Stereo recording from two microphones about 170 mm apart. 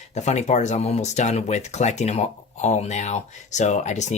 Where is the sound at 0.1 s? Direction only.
40° left (ahead or behind).